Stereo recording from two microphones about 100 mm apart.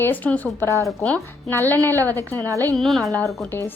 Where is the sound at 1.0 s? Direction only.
10° left (ahead or behind).